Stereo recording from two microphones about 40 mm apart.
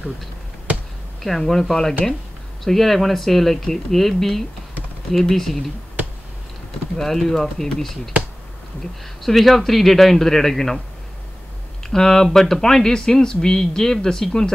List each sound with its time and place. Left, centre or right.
1.2 s speech: centre
7.0 s speech: centre
9.2 s speech: centre
11.9 s speech: centre